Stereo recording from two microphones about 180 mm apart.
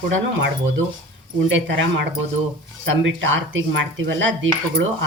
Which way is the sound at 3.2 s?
90° right.